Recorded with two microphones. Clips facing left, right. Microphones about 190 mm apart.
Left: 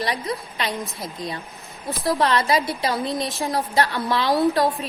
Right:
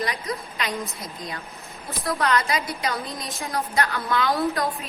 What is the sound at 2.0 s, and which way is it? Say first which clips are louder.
A woman's voice: left 3 dB; 30° left (ahead or behind).